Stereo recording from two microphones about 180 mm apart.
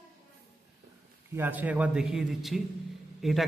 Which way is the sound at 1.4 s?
10° right (ahead or behind).